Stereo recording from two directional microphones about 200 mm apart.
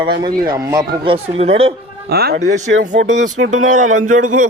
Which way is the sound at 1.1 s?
30° right (ahead or behind).